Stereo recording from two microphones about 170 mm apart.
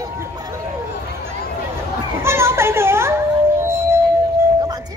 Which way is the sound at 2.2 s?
15° right (ahead or behind).